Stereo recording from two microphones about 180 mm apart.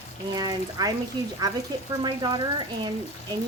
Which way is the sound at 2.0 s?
25° right (ahead or behind).